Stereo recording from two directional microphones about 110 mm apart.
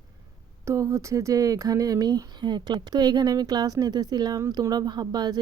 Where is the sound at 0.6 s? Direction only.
30° right (ahead or behind).